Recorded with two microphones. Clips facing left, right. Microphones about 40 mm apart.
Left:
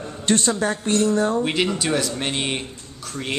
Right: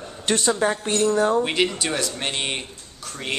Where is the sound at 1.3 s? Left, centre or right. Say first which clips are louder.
Even; centre.